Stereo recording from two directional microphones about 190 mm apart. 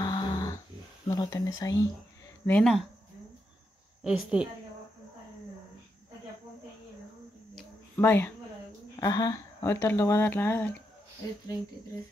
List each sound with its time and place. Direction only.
0.0 s dog: 20° left (ahead or behind)
1.0 s speech: 20° left (ahead or behind)
2.4 s a woman's voice: 5° left (ahead or behind)
4.0 s a woman's voice: 5° right (ahead or behind)
7.9 s speech: 10° left (ahead or behind)